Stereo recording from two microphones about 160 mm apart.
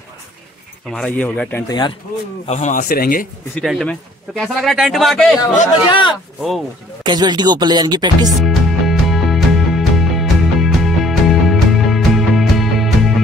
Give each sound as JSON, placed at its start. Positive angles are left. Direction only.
{"t": 0.8, "sound": "speech", "side_deg": 5}
{"t": 1.7, "sound": "speech", "side_deg": 30}
{"t": 2.4, "sound": "speech", "side_deg": 45}
{"t": 3.6, "sound": "a man's voice", "side_deg": 0}
{"t": 5.9, "sound": "speech", "side_deg": 30}
{"t": 7.1, "sound": "speech", "side_deg": -25}
{"t": 8.4, "sound": "music", "side_deg": 0}